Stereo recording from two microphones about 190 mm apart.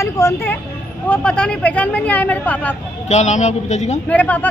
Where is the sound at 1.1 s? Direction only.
5° left (ahead or behind).